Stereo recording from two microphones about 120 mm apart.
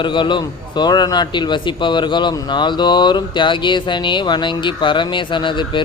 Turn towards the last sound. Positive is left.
turn(degrees=40)  # may be behind; listen again after turning